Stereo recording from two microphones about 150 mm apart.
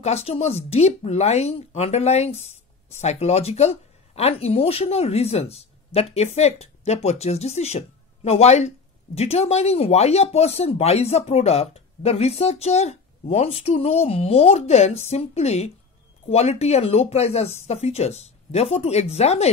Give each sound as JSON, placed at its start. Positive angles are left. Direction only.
{"t": 0.0, "sound": "speech", "side_deg": 45}